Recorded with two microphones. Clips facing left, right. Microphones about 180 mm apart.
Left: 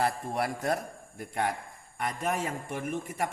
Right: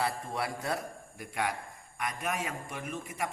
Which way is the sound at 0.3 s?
50° left (ahead or behind).